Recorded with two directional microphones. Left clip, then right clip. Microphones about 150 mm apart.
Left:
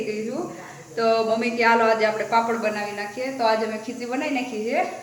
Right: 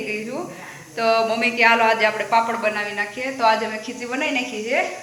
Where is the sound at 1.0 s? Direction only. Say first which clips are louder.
Right 2 dB; 15° left (ahead or behind).